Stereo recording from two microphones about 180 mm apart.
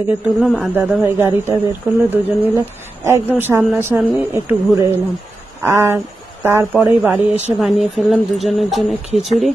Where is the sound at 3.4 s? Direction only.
10° right (ahead or behind).